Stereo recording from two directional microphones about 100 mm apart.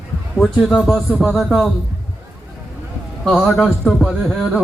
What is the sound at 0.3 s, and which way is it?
A man's voice, 5° left (ahead or behind).